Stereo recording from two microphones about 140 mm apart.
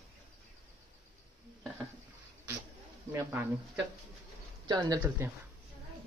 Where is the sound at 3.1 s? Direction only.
15° right (ahead or behind).